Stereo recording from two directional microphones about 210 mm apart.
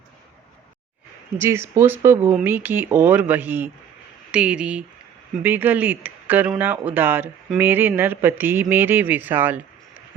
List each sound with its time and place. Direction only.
1.4 s speech: 10° right (ahead or behind)